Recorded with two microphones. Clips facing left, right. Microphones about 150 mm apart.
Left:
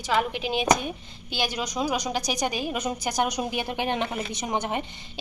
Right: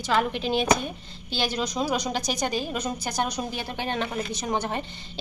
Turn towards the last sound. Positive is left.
turn(degrees=20)  # may be behind; listen again after turning